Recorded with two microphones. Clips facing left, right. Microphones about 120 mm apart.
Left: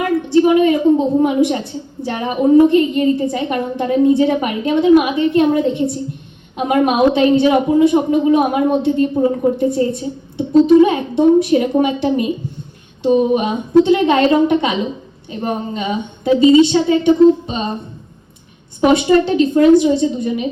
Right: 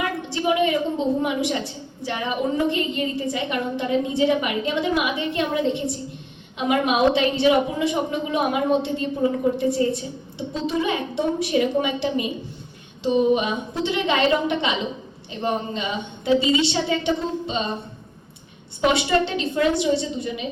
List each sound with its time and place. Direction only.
0.0 s a woman's voice: 45° left (ahead or behind)
16.3 s a woman's voice: 30° left (ahead or behind)
16.6 s a woman's voice: 45° left (ahead or behind)
18.9 s a woman's voice: 45° left (ahead or behind)